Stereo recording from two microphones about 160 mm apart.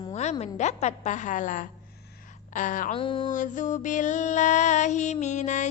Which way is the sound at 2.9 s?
35° left (ahead or behind).